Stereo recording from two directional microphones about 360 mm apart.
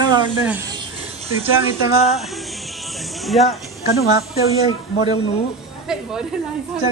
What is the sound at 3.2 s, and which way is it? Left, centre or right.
Speech, centre.